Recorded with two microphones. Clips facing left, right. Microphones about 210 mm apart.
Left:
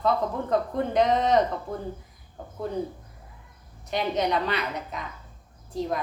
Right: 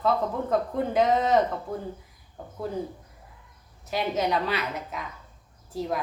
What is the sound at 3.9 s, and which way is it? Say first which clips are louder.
Speech: left 1 dB; 5° right (ahead or behind).